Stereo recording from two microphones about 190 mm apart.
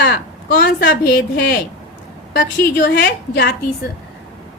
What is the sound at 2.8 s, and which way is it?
Speech, 60° left (ahead or behind).